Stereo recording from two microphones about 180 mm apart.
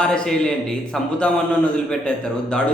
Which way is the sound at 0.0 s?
5° left (ahead or behind).